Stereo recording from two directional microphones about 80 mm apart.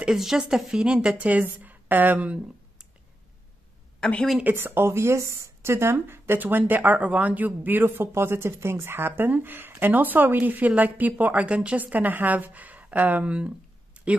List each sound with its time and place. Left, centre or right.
0.0 s speech: centre
4.4 s speech: right
14.0 s a sound: centre